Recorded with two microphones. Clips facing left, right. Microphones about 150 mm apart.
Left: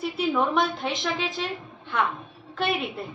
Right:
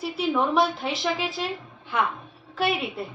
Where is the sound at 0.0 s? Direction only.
Centre (ahead or behind).